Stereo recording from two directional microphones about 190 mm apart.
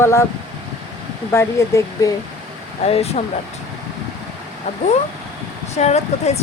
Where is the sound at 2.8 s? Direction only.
30° left (ahead or behind).